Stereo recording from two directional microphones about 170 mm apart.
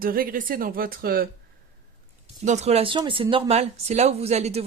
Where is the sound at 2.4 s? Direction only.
40° right (ahead or behind).